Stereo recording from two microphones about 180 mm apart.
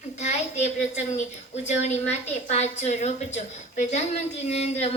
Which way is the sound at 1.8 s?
40° left (ahead or behind).